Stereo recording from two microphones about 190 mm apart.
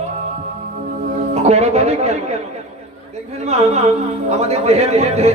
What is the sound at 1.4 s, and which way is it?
Speech, 35° right (ahead or behind).